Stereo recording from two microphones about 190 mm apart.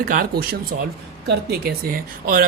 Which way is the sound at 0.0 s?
50° right (ahead or behind).